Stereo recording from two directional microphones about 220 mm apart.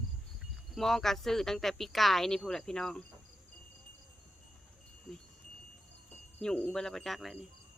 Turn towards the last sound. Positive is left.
turn(degrees=0)  # may be behind; listen again after turning